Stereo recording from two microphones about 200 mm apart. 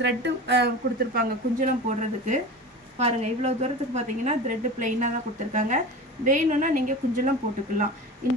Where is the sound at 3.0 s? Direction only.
35° right (ahead or behind).